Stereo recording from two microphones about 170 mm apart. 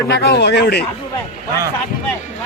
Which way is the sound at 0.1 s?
80° left.